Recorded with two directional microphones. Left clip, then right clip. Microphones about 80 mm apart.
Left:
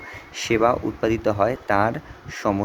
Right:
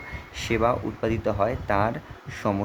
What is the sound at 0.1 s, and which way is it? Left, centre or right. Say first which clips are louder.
Speech: left 5 dB; left.